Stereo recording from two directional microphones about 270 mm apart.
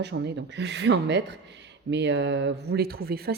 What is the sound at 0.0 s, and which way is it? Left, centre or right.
Speech, right.